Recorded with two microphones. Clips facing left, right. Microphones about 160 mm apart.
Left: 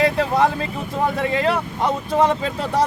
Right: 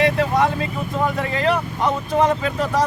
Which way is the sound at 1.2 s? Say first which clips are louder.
Left 2 dB; 30° left (ahead or behind).